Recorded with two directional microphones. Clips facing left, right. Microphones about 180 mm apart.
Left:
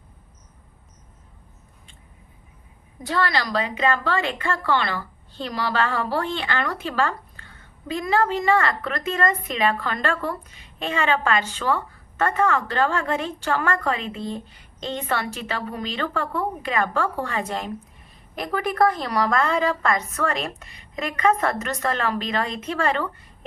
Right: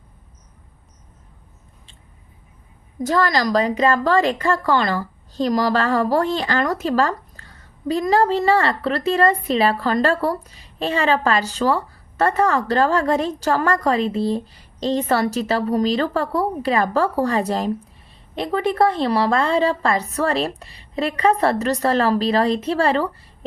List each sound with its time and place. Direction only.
3.0 s a woman's voice: 45° right (ahead or behind)